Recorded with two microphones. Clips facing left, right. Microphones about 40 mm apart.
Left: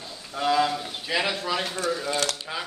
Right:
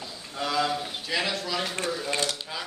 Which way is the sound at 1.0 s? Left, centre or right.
Centre.